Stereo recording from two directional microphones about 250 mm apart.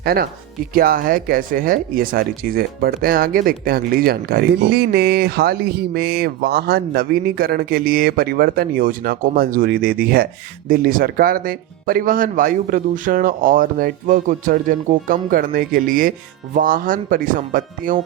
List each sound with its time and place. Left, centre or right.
0.0 s speech: right